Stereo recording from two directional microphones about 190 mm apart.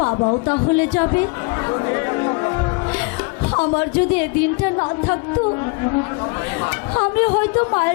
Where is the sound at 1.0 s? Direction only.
20° left (ahead or behind).